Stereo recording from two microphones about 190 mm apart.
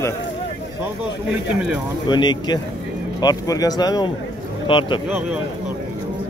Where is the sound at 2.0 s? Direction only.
25° left (ahead or behind).